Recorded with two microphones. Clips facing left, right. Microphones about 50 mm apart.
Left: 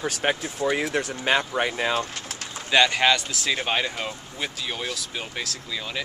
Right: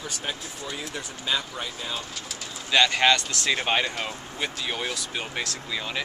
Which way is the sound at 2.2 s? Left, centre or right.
Left.